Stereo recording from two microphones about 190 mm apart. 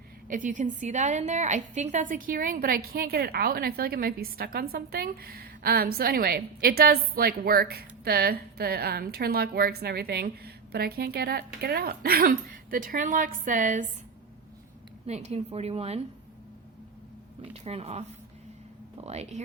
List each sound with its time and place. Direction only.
0.3 s a woman's voice: 40° right (ahead or behind)
15.0 s a woman's voice: 35° right (ahead or behind)
17.5 s a woman's voice: 30° right (ahead or behind)
19.0 s a woman's voice: 35° right (ahead or behind)